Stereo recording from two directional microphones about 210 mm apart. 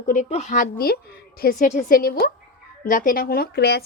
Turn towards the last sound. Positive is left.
turn(degrees=50)  # may be behind; listen again after turning